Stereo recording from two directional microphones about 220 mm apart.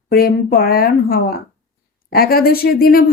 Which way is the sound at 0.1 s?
45° left (ahead or behind).